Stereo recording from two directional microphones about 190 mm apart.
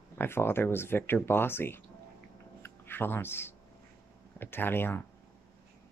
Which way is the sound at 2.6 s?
10° left (ahead or behind).